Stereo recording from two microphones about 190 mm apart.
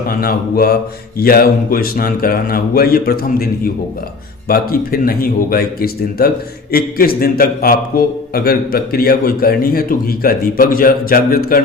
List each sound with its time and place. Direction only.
0.1 s speech: 50° left (ahead or behind)